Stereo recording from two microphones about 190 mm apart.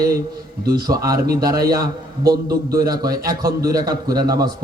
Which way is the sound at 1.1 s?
55° right (ahead or behind).